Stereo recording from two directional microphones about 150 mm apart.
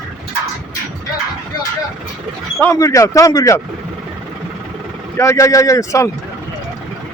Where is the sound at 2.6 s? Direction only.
20° left (ahead or behind).